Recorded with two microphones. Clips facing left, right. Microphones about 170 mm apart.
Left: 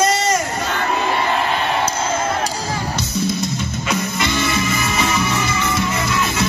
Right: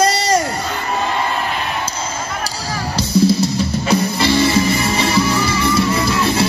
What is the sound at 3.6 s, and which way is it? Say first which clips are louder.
Music: right 6 dB; 35° right (ahead or behind).